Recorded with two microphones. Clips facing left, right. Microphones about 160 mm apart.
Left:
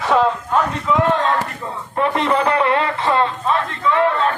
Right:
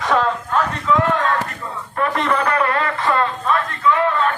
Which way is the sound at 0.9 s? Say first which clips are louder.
Left 1 dB; 15° left (ahead or behind).